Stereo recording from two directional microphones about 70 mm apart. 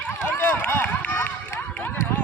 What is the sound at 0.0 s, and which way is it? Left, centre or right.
Run, centre.